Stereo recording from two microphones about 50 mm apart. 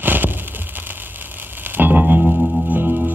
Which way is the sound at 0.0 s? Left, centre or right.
Right.